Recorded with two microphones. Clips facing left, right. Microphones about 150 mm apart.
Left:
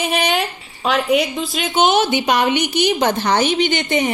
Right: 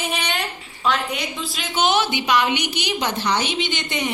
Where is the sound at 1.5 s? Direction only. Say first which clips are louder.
Left 5 dB; 50° left (ahead or behind).